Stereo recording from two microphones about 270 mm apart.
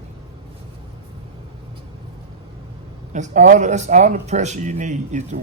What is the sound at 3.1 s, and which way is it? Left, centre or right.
Speech, right.